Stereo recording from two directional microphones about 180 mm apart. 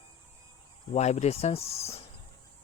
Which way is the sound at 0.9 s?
40° left (ahead or behind).